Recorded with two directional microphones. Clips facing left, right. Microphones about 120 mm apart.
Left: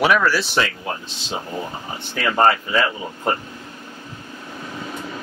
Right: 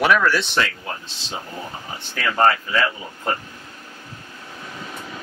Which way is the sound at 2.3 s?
20° left (ahead or behind).